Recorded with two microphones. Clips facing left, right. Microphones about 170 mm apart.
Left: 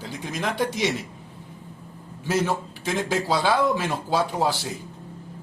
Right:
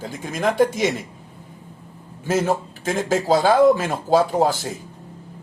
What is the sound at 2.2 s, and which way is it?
Speech, 45° right (ahead or behind).